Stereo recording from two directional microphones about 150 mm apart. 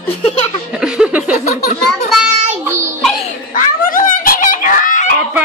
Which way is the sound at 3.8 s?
65° left (ahead or behind).